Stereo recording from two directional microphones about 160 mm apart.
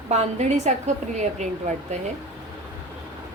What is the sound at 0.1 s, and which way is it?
A woman's voice, 45° right (ahead or behind).